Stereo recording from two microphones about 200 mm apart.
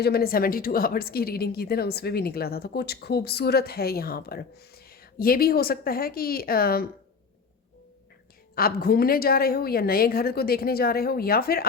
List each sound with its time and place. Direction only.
0.0 s a woman's voice: 50° left (ahead or behind)
8.5 s a woman's voice: 50° left (ahead or behind)